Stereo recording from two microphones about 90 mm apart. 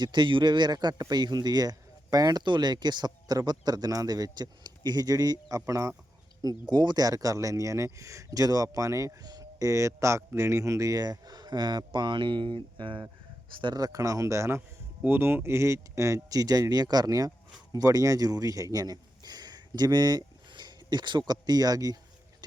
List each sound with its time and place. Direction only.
0.0 s speech: 60° right (ahead or behind); by 5.9 s 35° right (ahead or behind)
6.4 s speech: 50° right (ahead or behind)
13.8 s speech: 40° right (ahead or behind)